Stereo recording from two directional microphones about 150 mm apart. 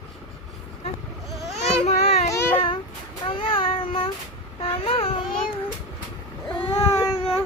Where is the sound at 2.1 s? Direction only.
40° left (ahead or behind).